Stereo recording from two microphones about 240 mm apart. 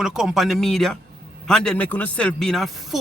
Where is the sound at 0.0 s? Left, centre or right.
Centre.